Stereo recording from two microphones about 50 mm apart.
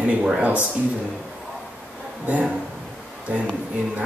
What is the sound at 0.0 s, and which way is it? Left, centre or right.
Speech, right.